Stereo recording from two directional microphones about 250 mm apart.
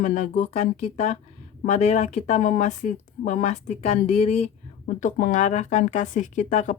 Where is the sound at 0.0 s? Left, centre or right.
Left.